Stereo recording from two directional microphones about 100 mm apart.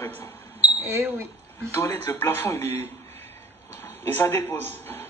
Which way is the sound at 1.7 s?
25° left (ahead or behind).